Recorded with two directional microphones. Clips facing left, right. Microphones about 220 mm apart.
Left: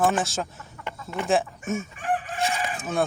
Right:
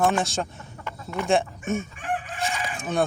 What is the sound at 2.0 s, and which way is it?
Chicken, 45° left (ahead or behind).